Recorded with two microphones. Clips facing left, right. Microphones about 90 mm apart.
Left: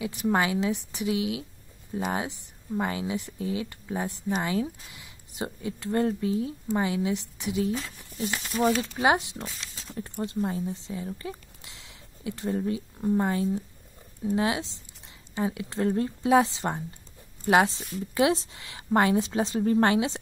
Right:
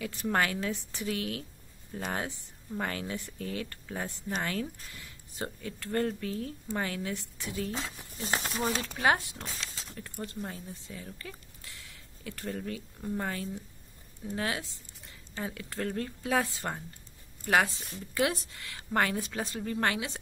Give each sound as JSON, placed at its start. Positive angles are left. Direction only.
{"t": 0.0, "sound": "a woman's voice", "side_deg": 15}
{"t": 7.7, "sound": "speech", "side_deg": -25}
{"t": 8.2, "sound": "speech", "side_deg": -40}
{"t": 8.6, "sound": "a woman's voice", "side_deg": 20}